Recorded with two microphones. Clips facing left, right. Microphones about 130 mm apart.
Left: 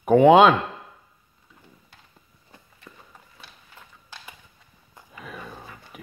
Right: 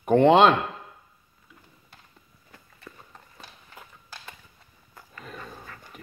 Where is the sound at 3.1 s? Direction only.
10° left (ahead or behind).